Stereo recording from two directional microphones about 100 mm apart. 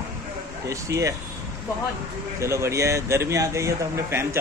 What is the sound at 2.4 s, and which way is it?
Speech, 30° right (ahead or behind).